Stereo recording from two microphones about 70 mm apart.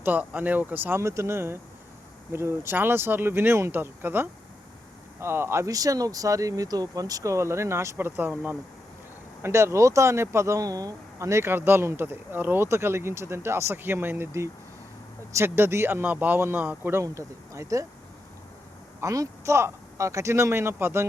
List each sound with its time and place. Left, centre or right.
0.0 s speech: right
0.9 s speech: right
5.6 s speech: right
9.4 s speech: right
11.3 s speech: right
17.0 s speech: right
18.9 s a woman's voice: right